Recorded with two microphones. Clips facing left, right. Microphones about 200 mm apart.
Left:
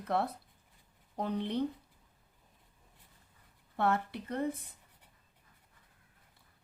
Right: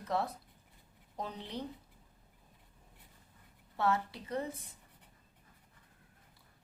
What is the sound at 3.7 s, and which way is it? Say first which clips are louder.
Speech: left 1 dB; 55° left (ahead or behind).